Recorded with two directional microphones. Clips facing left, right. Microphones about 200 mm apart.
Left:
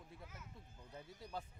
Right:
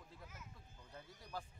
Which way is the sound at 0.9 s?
25° left (ahead or behind).